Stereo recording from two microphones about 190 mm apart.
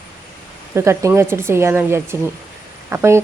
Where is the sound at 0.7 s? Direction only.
15° right (ahead or behind).